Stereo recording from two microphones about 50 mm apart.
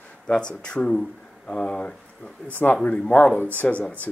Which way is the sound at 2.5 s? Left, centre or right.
Left.